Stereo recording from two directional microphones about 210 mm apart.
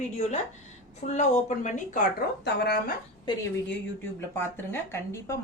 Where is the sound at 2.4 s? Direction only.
55° left (ahead or behind).